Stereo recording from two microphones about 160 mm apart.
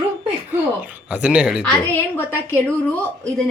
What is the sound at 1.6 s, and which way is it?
Speech, 5° left (ahead or behind).